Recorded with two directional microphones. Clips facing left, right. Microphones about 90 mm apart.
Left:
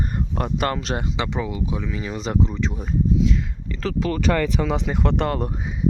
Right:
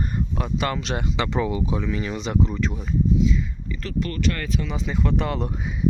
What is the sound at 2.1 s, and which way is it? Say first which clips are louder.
Speech: left 1 dB; 40° left (ahead or behind).